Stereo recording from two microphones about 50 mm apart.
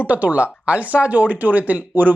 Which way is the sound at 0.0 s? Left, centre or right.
Right.